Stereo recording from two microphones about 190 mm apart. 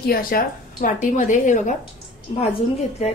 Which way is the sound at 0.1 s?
50° left (ahead or behind).